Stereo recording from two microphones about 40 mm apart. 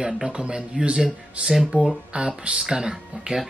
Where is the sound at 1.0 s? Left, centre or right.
Centre.